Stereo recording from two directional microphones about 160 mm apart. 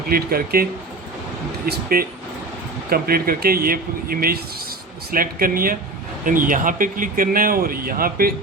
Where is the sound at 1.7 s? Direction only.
65° right (ahead or behind).